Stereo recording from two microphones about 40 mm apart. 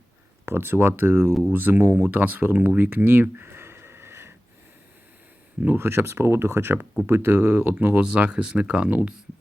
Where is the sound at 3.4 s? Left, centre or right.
Right.